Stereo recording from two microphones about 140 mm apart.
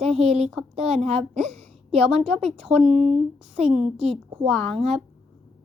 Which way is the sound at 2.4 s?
5° right (ahead or behind).